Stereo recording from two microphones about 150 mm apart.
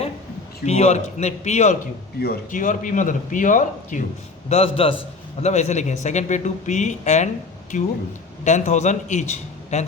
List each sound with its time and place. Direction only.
0.6 s speech: 45° left (ahead or behind)
2.2 s a man's voice: 75° left (ahead or behind); by 4.0 s 60° left (ahead or behind)
4.4 s a man's voice: 45° left (ahead or behind)